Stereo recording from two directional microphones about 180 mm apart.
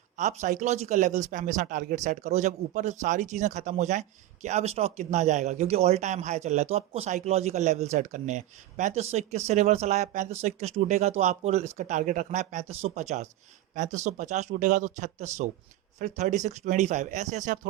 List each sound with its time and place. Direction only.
0.2 s speech: 45° right (ahead or behind)